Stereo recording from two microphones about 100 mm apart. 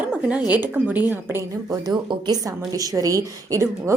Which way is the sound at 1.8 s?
45° right (ahead or behind).